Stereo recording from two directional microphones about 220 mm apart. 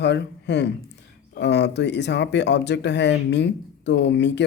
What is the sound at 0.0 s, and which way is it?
Speech, 50° left (ahead or behind).